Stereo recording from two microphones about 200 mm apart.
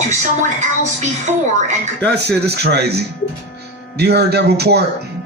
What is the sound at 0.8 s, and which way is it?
Speech, 35° right (ahead or behind).